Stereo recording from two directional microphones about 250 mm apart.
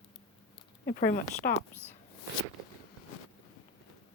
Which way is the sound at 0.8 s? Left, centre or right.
Left.